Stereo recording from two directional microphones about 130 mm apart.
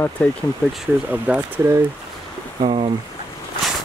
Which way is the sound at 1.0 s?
10° right (ahead or behind).